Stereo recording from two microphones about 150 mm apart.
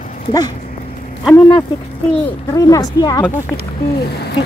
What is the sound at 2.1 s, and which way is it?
Speech, 10° left (ahead or behind).